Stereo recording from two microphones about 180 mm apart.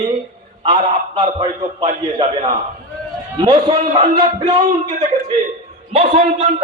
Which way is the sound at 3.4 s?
25° right (ahead or behind).